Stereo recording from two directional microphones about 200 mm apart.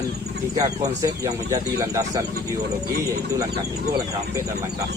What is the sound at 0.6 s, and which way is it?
Speech, 20° right (ahead or behind).